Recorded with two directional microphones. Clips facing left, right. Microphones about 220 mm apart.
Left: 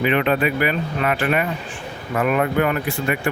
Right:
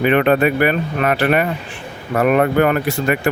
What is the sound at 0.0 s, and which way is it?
Speech, 50° right (ahead or behind).